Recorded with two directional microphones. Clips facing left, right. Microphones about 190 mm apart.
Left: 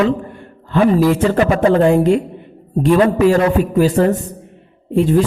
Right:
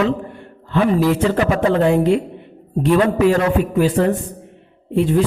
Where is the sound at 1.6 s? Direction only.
40° left (ahead or behind).